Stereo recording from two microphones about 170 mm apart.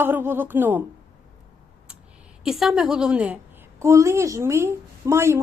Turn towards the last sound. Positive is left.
turn(degrees=-15)  # may be behind; listen again after turning